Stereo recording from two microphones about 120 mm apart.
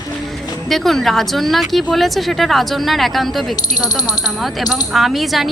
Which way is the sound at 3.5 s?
35° left (ahead or behind).